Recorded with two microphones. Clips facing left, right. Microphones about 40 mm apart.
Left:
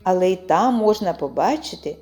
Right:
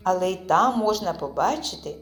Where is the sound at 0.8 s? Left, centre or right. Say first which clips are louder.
Left 5 dB; left.